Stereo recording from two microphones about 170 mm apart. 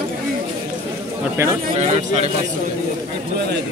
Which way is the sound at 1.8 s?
40° right (ahead or behind).